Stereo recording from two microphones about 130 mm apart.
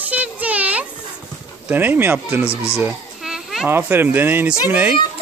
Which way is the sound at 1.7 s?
15° right (ahead or behind).